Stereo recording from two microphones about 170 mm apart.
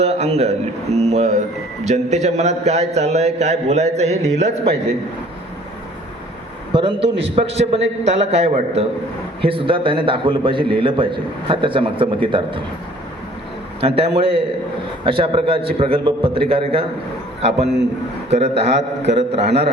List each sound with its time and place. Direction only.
0.0 s a man's voice: 35° right (ahead or behind)
4.6 s a man's voice: 75° right (ahead or behind)
6.7 s a man's voice: 35° right (ahead or behind)
13.8 s a man's voice: 35° right (ahead or behind)
18.3 s a man's voice: 40° right (ahead or behind)
18.6 s a man's voice: 90° right